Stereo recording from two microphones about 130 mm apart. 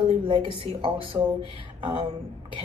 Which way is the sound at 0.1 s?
40° right (ahead or behind).